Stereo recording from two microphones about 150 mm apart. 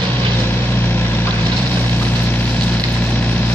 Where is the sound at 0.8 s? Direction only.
10° left (ahead or behind).